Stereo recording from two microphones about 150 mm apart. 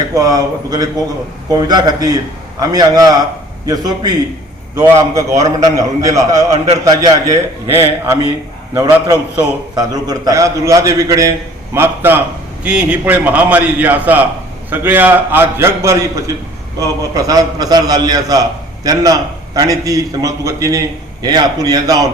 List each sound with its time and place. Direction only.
0.1 s a man's voice: 25° right (ahead or behind)